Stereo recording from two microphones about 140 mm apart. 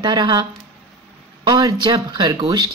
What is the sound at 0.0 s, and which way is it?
Speech, 30° right (ahead or behind).